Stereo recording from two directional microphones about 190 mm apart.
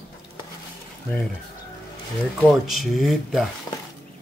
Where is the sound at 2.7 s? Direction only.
Centre (ahead or behind).